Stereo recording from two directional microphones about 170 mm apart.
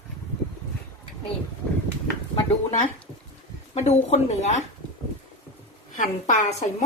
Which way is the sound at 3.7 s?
40° left (ahead or behind).